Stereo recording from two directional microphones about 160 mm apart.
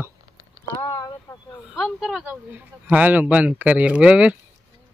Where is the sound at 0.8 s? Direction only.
25° left (ahead or behind).